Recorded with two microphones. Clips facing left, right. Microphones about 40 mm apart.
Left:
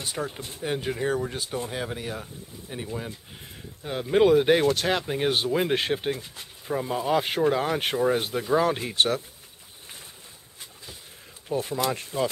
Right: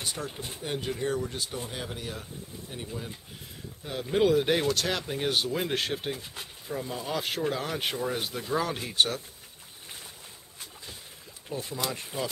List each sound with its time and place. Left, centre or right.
0.0 s speech: centre
0.8 s speech: left
8.9 s speech: left
11.5 s speech: left
12.1 s speech: centre